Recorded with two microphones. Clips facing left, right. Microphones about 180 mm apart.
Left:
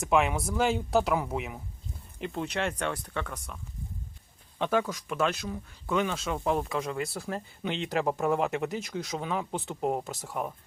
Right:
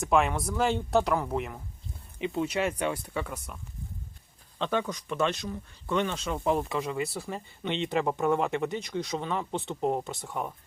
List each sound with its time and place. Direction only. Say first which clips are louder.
0.0 s speech: even; centre (ahead or behind)
4.5 s speech: left 2 dB; 5° left (ahead or behind)